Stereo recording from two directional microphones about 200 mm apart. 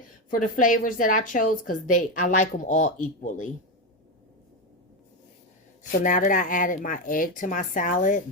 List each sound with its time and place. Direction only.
0.3 s a woman's voice: 40° left (ahead or behind)
5.9 s a woman's voice: 40° left (ahead or behind)